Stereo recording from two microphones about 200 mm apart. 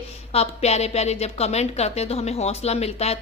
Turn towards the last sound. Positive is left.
turn(degrees=30)  # may be behind; listen again after turning